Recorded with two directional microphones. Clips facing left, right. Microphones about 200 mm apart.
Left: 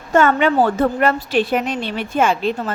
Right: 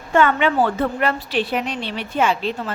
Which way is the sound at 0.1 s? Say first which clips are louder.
Left 2 dB; 45° left (ahead or behind).